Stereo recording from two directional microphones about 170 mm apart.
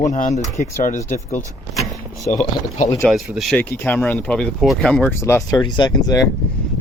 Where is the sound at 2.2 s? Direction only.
45° left (ahead or behind).